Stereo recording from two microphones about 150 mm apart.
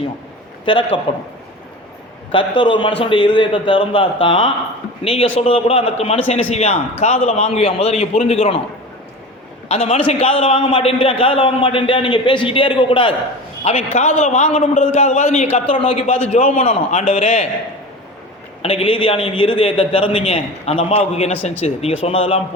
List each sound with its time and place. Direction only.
0.6 s a man's voice: 35° left (ahead or behind)
2.3 s a man's voice: 35° left (ahead or behind)
9.6 s a man's voice: 45° left (ahead or behind)
18.6 s a man's voice: 40° left (ahead or behind)